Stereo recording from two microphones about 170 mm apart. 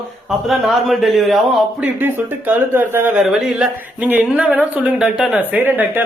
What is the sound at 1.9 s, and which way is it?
Speech, 10° right (ahead or behind).